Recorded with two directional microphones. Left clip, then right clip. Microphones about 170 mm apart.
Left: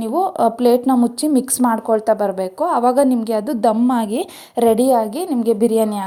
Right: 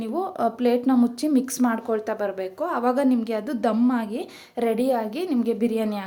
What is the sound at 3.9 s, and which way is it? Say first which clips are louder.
Speech: left 7 dB; 35° left (ahead or behind).